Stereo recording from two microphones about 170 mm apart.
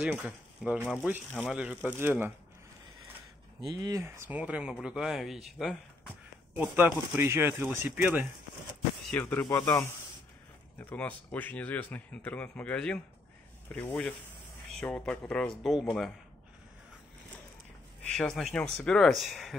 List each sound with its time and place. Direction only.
0.0 s speech: 5° right (ahead or behind)
3.6 s speech: 20° right (ahead or behind); by 5.8 s centre (ahead or behind)
6.5 s speech: 10° right (ahead or behind)
9.2 s speech: 20° left (ahead or behind)
10.8 s speech: 10° left (ahead or behind)
18.1 s speech: 5° left (ahead or behind)